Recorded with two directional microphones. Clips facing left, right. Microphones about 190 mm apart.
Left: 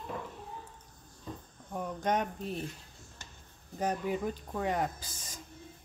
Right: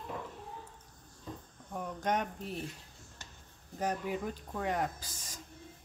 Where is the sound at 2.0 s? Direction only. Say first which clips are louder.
Left 2 dB; 20° left (ahead or behind).